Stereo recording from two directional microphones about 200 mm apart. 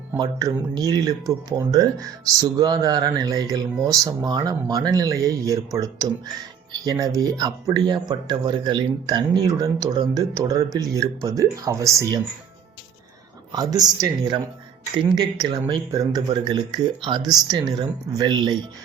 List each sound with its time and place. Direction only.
0.2 s speech: 20° right (ahead or behind)
13.5 s speech: 20° right (ahead or behind)